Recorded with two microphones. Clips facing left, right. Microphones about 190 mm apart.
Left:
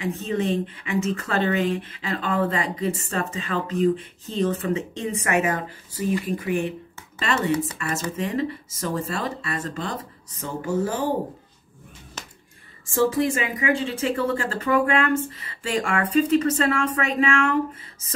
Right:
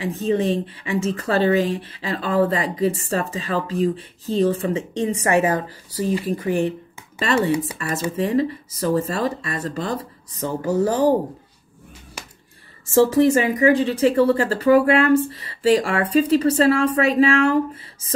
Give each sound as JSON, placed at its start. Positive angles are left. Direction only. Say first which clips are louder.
{"t": 0.0, "sound": "speech", "louder": "right 4 dB", "side_deg": -35}
{"t": 7.8, "sound": "speech", "louder": "right 4 dB", "side_deg": -40}
{"t": 12.2, "sound": "a sound", "louder": "right 2 dB", "side_deg": -10}
{"t": 13.1, "sound": "speech", "louder": "right 7 dB", "side_deg": -40}